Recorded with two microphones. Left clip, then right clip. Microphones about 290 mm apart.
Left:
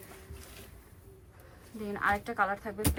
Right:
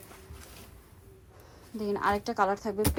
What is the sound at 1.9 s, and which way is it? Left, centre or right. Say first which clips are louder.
Speech: right 2 dB; centre.